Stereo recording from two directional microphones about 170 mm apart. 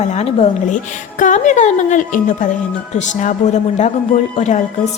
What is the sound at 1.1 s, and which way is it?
A woman's voice, 50° left (ahead or behind).